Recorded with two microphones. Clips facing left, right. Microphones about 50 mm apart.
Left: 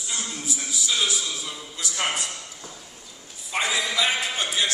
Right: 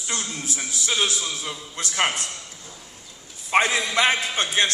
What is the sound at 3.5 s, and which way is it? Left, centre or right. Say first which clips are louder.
Speech: right 5 dB; right.